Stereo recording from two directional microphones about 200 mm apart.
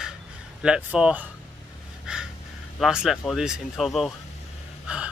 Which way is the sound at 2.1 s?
5° right (ahead or behind).